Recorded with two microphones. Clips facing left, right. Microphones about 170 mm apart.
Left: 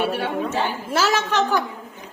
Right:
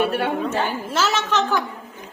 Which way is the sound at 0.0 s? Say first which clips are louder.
Right 2 dB; 55° right (ahead or behind).